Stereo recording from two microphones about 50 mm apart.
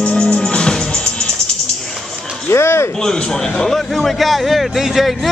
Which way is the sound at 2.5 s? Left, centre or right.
Left.